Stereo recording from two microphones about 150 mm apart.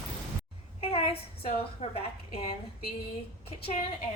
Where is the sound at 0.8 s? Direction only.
40° left (ahead or behind).